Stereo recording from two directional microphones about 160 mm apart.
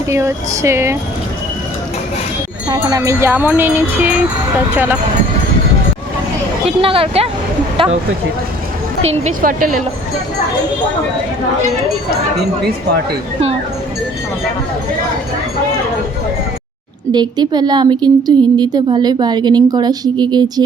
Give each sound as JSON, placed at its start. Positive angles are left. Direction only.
{"t": 0.1, "sound": "speech", "side_deg": -15}
{"t": 2.6, "sound": "speech", "side_deg": -25}
{"t": 6.7, "sound": "speech", "side_deg": -35}
{"t": 9.4, "sound": "speech", "side_deg": -60}
{"t": 17.1, "sound": "speech", "side_deg": -25}